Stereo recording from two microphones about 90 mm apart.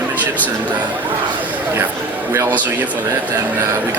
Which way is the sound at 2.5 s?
20° right (ahead or behind).